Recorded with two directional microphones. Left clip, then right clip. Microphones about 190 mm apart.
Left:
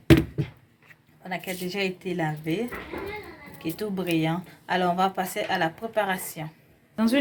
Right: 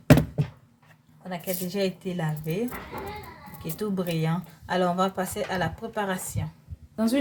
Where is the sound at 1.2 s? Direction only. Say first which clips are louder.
Left 1 dB; 10° left (ahead or behind).